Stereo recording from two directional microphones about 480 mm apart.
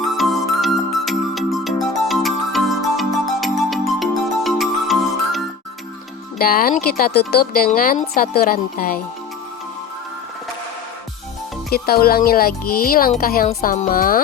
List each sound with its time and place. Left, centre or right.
0.2 s music: centre
6.4 s a child's voice: centre
11.7 s a child's voice: centre